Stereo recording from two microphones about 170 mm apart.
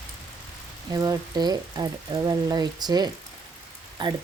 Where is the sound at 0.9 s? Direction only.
20° right (ahead or behind).